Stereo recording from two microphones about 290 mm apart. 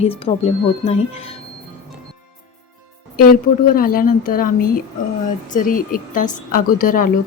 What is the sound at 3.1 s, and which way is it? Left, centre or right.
Speech, left.